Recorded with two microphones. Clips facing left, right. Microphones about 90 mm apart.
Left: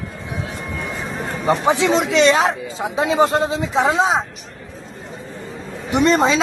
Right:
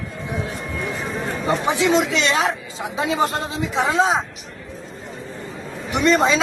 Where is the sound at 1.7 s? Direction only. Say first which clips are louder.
Even; 35° left (ahead or behind).